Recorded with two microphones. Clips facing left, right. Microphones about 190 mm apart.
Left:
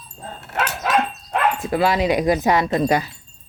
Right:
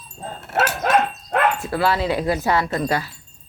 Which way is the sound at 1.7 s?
15° left (ahead or behind).